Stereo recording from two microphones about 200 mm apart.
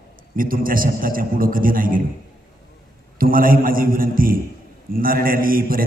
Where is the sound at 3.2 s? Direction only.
45° right (ahead or behind).